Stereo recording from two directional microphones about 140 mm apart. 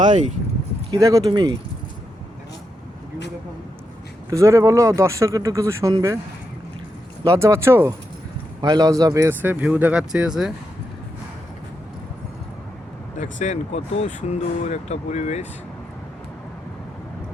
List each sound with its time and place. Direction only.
0.9 s speech: 25° right (ahead or behind)
4.3 s speech: 20° right (ahead or behind)
7.3 s speech: 20° right (ahead or behind)
8.6 s speech: 30° right (ahead or behind); by 10.5 s 5° right (ahead or behind)
13.1 s speech: 60° left (ahead or behind)